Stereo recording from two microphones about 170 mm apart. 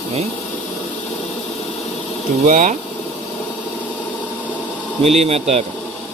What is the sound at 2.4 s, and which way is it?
Speech, 45° right (ahead or behind).